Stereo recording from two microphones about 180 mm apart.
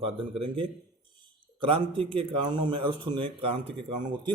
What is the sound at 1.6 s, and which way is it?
A man's voice, 30° right (ahead or behind).